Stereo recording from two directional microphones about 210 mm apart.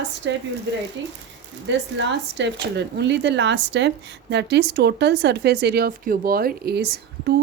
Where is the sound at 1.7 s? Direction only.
60° right (ahead or behind).